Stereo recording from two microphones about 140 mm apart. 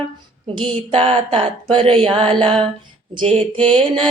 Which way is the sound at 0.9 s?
45° right (ahead or behind).